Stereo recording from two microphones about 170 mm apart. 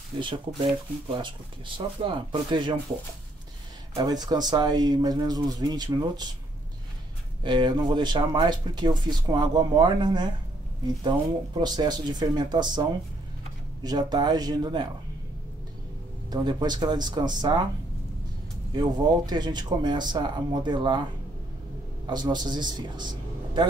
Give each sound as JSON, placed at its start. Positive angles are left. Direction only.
{"t": 0.2, "sound": "speech", "side_deg": -30}
{"t": 4.0, "sound": "speech", "side_deg": -25}
{"t": 7.4, "sound": "speech", "side_deg": -25}
{"t": 13.8, "sound": "speech", "side_deg": -25}
{"t": 16.3, "sound": "speech", "side_deg": -25}
{"t": 18.8, "sound": "speech", "side_deg": -25}
{"t": 22.0, "sound": "a man's voice", "side_deg": -25}